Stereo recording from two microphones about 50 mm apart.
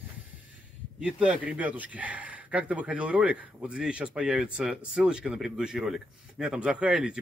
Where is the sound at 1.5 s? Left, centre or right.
Right; by 7.2 s centre.